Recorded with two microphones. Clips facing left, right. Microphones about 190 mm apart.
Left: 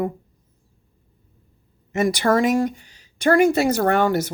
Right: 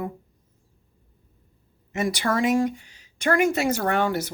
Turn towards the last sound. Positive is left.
turn(degrees=45)  # may be behind; listen again after turning